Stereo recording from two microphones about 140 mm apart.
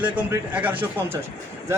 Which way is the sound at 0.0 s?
10° right (ahead or behind).